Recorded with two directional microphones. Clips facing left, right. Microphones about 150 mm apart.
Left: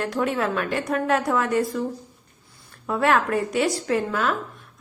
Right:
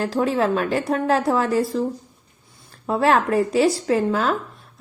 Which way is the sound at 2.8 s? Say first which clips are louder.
Right 3 dB; 30° right (ahead or behind).